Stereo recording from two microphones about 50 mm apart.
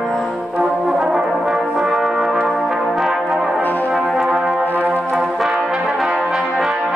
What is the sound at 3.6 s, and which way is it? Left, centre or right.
Brass instrument, left.